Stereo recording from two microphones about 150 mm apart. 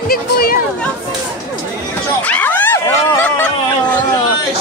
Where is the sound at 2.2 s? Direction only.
10° left (ahead or behind).